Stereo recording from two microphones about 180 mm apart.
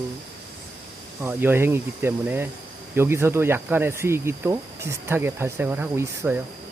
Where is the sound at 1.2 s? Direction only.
10° right (ahead or behind).